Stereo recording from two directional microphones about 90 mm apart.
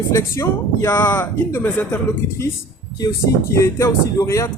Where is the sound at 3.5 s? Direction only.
35° left (ahead or behind).